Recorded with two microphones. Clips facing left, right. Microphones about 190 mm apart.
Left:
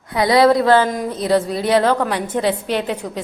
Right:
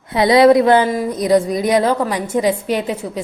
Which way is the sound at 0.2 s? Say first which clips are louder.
Right 3 dB; 20° right (ahead or behind).